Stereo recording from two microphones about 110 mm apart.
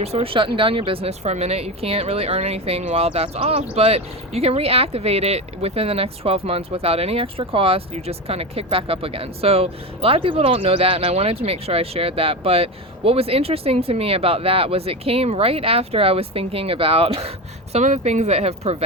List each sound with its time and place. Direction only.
0.0 s speech: 65° right (ahead or behind)